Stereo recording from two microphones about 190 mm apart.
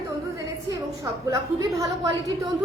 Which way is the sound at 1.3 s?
20° right (ahead or behind).